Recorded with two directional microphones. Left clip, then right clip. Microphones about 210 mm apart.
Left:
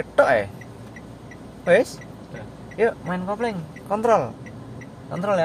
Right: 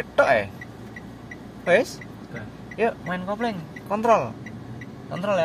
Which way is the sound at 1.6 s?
20° left (ahead or behind).